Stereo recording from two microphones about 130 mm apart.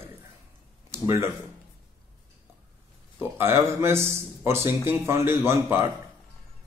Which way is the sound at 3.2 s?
15° right (ahead or behind).